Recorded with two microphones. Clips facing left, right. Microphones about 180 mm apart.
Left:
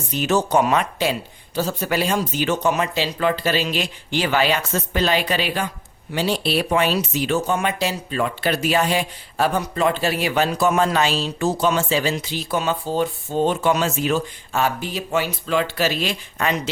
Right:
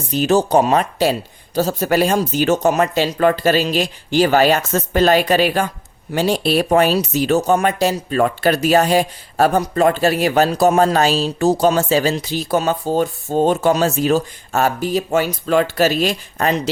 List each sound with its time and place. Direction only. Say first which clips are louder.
0.1 s speech: right 5 dB; 35° right (ahead or behind)